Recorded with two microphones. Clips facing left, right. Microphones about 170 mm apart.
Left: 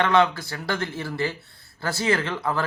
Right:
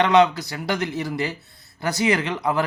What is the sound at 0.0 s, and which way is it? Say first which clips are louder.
Speech: right 3 dB; 20° right (ahead or behind).